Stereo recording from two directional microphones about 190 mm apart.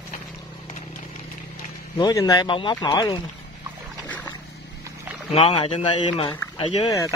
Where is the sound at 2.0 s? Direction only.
20° left (ahead or behind).